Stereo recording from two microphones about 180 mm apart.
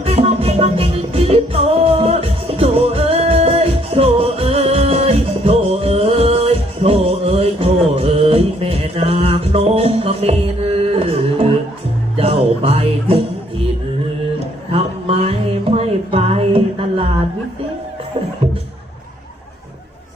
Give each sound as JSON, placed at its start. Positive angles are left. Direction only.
{"t": 0.0, "sound": "music", "side_deg": -35}
{"t": 10.8, "sound": "a sound", "side_deg": -35}
{"t": 12.1, "sound": "music", "side_deg": -35}
{"t": 14.7, "sound": "music", "side_deg": -35}